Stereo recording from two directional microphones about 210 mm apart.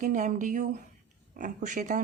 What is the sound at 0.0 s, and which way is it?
A woman's voice, 35° right (ahead or behind).